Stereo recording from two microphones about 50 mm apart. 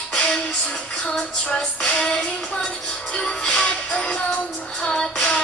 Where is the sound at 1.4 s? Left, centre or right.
Centre.